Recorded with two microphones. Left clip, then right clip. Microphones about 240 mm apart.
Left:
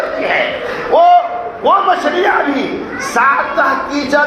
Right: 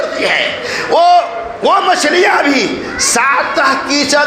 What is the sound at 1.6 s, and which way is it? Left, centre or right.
Speech, right.